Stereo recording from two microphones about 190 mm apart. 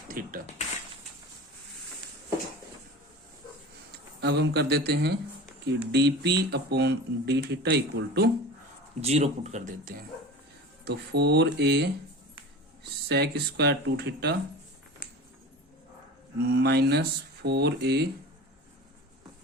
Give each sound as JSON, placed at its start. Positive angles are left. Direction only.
{"t": 0.1, "sound": "a sound", "side_deg": -45}
{"t": 4.2, "sound": "speech", "side_deg": -60}
{"t": 9.0, "sound": "speech", "side_deg": -35}
{"t": 10.8, "sound": "speech", "side_deg": -60}
{"t": 16.5, "sound": "speech", "side_deg": -60}